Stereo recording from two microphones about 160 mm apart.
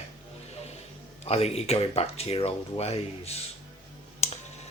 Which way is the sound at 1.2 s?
40° left (ahead or behind).